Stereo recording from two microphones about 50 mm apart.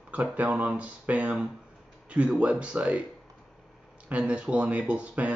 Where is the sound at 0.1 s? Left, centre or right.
Right.